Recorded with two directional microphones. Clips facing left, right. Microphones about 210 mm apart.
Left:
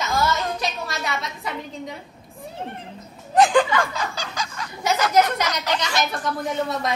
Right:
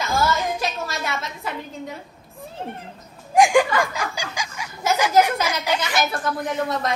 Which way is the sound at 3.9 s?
10° right (ahead or behind).